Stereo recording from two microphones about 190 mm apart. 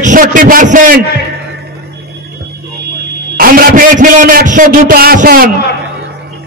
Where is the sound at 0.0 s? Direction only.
45° right (ahead or behind).